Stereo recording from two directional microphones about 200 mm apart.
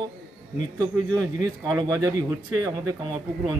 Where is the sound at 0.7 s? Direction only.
5° left (ahead or behind).